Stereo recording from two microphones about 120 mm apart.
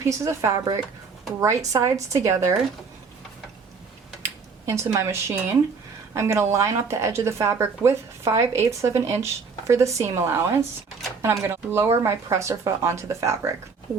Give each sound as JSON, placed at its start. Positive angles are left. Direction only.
{"t": 0.0, "sound": "speech", "side_deg": -25}
{"t": 4.2, "sound": "speech", "side_deg": -25}